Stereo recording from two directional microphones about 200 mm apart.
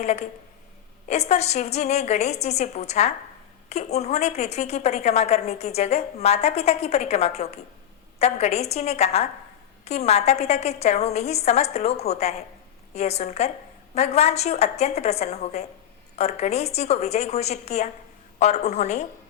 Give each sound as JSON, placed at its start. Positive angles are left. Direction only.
{"t": 0.0, "sound": "a woman's voice", "side_deg": 35}